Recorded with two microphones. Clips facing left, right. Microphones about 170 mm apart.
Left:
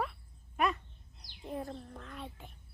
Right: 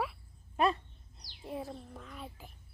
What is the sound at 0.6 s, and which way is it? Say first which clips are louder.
Speech: right 3 dB; 30° right (ahead or behind).